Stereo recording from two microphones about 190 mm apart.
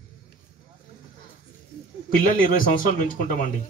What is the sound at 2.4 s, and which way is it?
Speech, 45° left (ahead or behind).